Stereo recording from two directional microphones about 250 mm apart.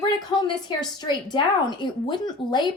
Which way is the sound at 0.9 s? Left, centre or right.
Centre.